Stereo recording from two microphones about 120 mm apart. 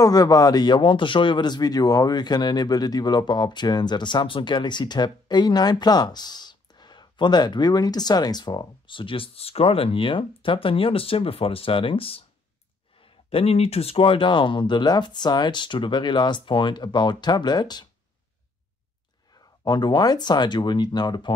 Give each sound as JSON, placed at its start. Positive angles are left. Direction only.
{"t": 0.0, "sound": "speech", "side_deg": 30}
{"t": 19.6, "sound": "speech", "side_deg": 35}